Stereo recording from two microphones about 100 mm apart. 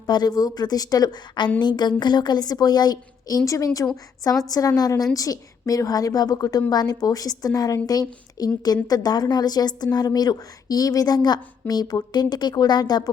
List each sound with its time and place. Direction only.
0.0 s a woman's voice: 40° left (ahead or behind)